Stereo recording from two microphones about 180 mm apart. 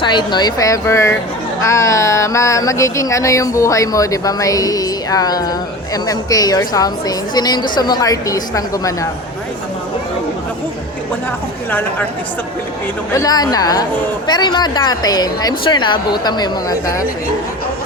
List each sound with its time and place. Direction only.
0.0 s a woman's voice: 25° left (ahead or behind)
13.1 s a woman's voice: 20° left (ahead or behind)